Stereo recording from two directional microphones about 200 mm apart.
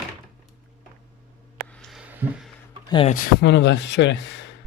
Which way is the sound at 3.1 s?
50° left (ahead or behind).